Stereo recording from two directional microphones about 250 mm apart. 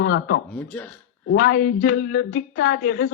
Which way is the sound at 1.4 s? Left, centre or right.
Left.